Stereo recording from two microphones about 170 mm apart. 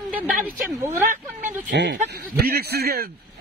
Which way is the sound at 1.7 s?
90° right.